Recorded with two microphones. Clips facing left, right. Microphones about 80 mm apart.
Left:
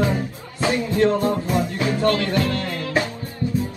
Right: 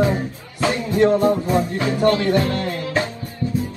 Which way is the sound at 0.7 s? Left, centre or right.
Right.